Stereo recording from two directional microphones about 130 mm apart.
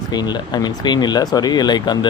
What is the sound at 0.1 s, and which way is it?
Speech, 35° left (ahead or behind).